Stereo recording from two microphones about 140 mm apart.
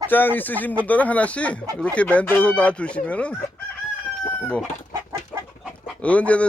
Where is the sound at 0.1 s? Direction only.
15° left (ahead or behind).